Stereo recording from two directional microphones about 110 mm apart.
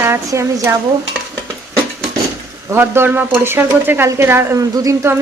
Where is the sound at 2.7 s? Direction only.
20° right (ahead or behind).